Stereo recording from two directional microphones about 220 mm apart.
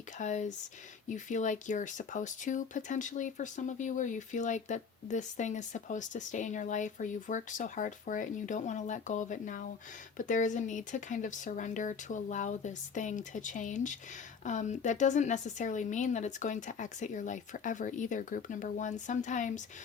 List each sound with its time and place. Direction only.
0.2 s speech: 35° left (ahead or behind)